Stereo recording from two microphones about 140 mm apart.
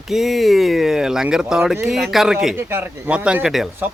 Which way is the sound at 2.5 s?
15° right (ahead or behind).